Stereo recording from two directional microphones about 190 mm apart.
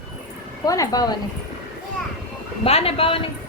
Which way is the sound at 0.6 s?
20° left (ahead or behind).